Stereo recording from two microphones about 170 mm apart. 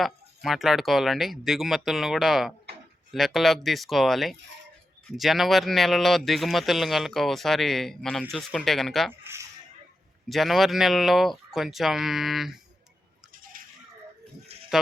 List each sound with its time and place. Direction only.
0.0 s speech: centre (ahead or behind)
9.2 s a sound: 15° right (ahead or behind)
10.2 s speech: centre (ahead or behind)
13.5 s coin: 55° right (ahead or behind)
14.7 s speech: centre (ahead or behind)